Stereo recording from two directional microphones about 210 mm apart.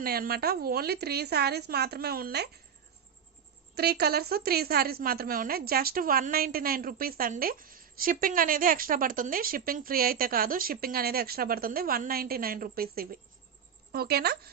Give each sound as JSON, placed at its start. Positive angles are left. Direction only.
{"t": 0.0, "sound": "a woman's voice", "side_deg": -45}
{"t": 3.8, "sound": "a woman's voice", "side_deg": -50}